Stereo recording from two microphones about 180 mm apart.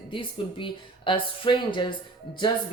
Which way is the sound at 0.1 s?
30° left (ahead or behind).